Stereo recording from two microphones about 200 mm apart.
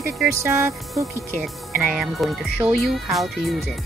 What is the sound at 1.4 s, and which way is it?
Speech, 5° right (ahead or behind).